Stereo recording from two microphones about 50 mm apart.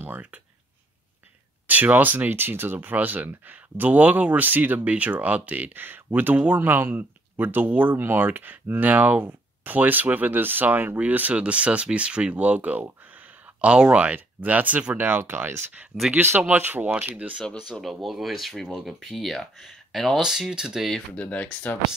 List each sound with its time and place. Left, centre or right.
0.0 s speech: right
1.7 s speech: right
6.6 s speech: right
8.0 s speech: right
15.3 s speech: right
17.6 s speech: centre
20.2 s speech: centre
21.1 s speech: left